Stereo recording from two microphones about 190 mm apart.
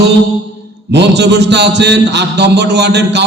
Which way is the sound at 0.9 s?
65° right (ahead or behind).